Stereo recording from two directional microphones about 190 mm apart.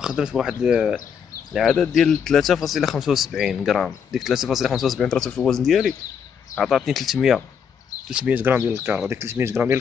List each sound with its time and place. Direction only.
0.0 s speech: 5° right (ahead or behind)